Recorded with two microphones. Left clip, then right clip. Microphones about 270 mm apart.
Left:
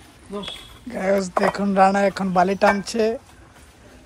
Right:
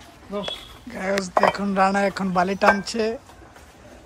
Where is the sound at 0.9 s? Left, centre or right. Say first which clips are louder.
Left 2 dB; centre.